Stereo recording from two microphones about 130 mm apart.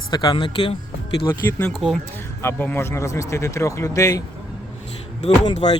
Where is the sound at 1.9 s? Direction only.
15° left (ahead or behind).